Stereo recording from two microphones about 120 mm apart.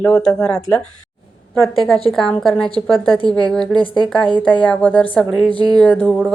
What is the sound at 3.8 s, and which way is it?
Speech, 45° left (ahead or behind).